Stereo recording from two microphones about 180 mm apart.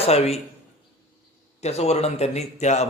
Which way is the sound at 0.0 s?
35° left (ahead or behind).